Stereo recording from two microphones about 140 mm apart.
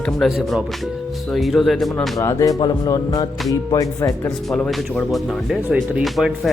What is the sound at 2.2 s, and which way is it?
Speech, 25° left (ahead or behind).